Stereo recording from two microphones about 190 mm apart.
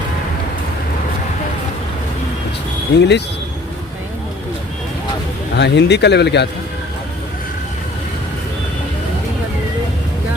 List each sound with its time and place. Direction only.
3.0 s speech: 65° left (ahead or behind)
5.5 s speech: 65° left (ahead or behind)